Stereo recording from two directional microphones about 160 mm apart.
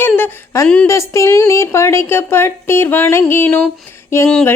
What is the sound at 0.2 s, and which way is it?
Speech, 20° left (ahead or behind).